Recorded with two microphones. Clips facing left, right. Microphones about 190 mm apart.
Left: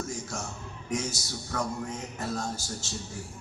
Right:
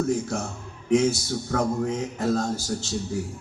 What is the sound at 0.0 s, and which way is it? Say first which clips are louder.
A man's voice: right 10 dB; 60° right (ahead or behind).